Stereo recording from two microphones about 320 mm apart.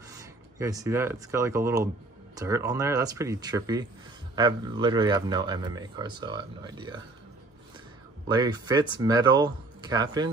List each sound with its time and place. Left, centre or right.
0.2 s speech: centre
8.3 s speech: centre